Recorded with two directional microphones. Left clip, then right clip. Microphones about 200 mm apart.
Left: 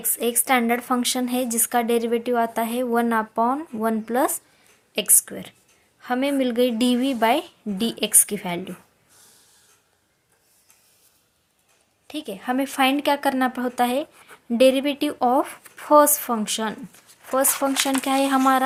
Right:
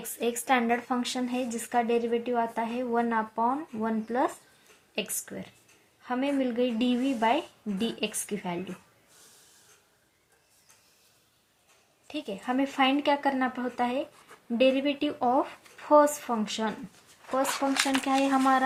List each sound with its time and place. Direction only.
0.2 s a woman's voice: 35° left (ahead or behind)
12.0 s a woman's voice: 35° left (ahead or behind)
18.0 s speech: 40° left (ahead or behind)